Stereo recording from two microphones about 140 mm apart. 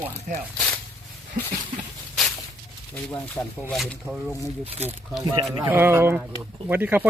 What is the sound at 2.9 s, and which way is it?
Speech, 10° left (ahead or behind).